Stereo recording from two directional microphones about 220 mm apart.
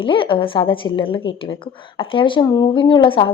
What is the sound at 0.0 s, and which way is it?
Speech, 25° left (ahead or behind).